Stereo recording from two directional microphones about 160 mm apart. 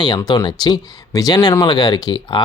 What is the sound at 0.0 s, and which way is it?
Speech, 25° left (ahead or behind).